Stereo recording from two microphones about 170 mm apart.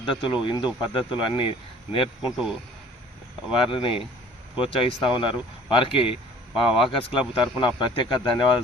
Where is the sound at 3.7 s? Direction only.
30° left (ahead or behind).